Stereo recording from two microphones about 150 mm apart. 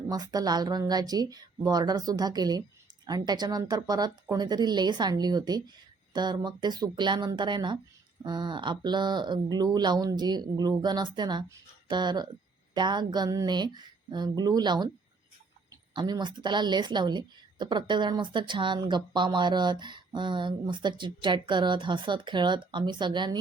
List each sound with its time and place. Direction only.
0.1 s a woman's voice: 25° right (ahead or behind)